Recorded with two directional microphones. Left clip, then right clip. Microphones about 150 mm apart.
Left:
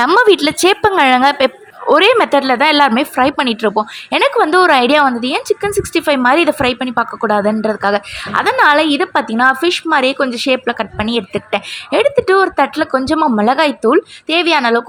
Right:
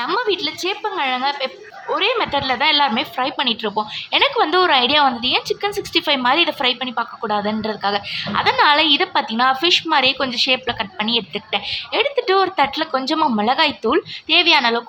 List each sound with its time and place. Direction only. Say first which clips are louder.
0.0 s a woman's voice: left 10 dB; 55° left (ahead or behind); by 14.8 s 35° left (ahead or behind)